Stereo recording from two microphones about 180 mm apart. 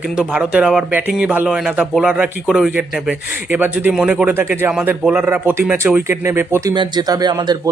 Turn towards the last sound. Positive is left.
turn(degrees=-25)  # may be behind; listen again after turning